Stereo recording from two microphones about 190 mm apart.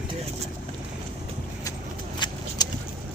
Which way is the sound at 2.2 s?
25° left (ahead or behind).